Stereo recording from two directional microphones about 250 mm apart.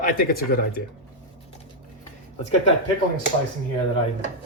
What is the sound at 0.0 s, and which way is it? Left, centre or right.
Speech, left.